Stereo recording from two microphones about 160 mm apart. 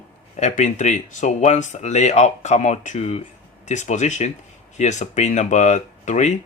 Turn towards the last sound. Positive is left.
turn(degrees=50)  # may be behind; listen again after turning